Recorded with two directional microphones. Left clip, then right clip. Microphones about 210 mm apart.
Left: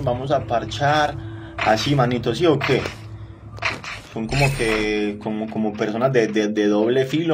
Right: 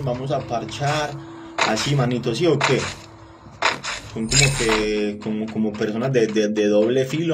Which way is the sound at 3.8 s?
50° right (ahead or behind).